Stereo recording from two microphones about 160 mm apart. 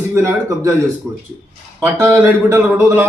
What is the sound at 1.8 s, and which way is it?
A man's voice, 15° right (ahead or behind).